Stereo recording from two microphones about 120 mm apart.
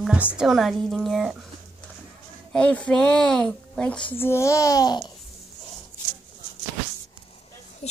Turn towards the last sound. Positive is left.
turn(degrees=65)  # may be behind; listen again after turning